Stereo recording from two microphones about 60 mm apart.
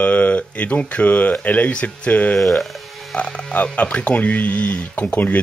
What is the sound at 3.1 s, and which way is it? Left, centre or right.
Speech, left.